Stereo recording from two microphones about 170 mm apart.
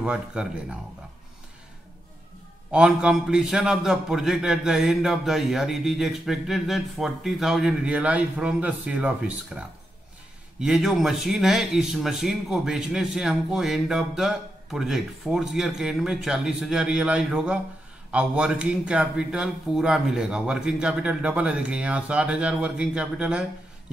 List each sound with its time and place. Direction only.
0.0 s a man's voice: 5° right (ahead or behind)
2.7 s a man's voice: 5° right (ahead or behind)